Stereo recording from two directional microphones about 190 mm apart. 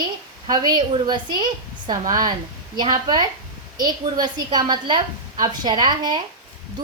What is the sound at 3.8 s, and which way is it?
A woman's voice, 20° right (ahead or behind).